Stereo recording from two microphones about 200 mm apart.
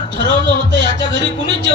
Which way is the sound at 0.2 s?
60° right (ahead or behind).